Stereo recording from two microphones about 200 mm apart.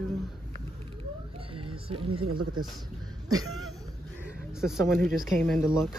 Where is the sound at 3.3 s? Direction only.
90° right.